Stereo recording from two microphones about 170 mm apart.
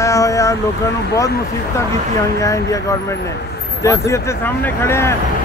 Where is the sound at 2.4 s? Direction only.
20° left (ahead or behind).